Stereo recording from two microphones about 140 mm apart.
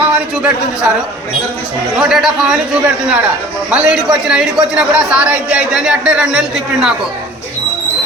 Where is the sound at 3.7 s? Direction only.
10° right (ahead or behind).